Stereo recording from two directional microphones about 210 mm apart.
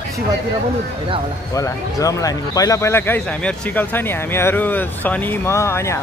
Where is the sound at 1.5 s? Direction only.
15° left (ahead or behind).